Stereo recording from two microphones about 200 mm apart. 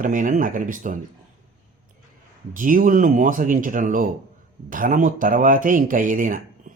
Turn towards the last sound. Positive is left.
turn(degrees=-45)  # may be behind; listen again after turning